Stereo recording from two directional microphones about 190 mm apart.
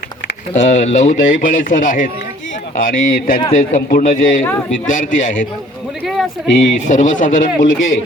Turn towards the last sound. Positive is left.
turn(degrees=45)  # may be behind; listen again after turning